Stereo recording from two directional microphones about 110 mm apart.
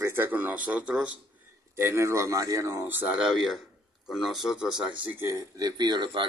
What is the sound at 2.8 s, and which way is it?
Speech, 15° right (ahead or behind).